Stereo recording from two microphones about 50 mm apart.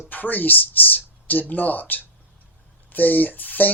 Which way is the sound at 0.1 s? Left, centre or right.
Left.